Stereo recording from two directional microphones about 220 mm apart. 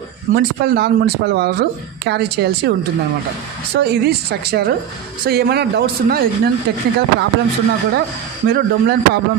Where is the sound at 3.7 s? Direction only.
45° right (ahead or behind).